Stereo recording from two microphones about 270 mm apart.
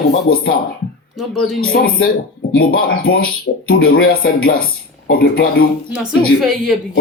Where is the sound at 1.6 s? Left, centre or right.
Left.